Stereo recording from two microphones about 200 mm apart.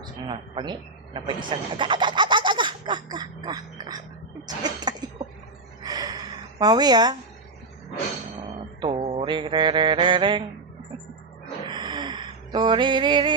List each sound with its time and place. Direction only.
0.0 s a man's voice: 20° right (ahead or behind)
5.8 s gasp: 20° right (ahead or behind)
8.8 s mantra: 25° right (ahead or behind)
11.6 s a sound: 20° right (ahead or behind)